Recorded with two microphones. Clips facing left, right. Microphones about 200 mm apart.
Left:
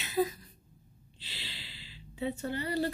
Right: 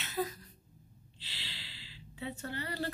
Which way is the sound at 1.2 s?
15° left (ahead or behind).